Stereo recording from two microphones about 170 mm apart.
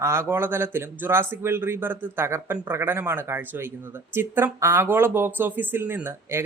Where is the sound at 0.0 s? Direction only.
15° right (ahead or behind).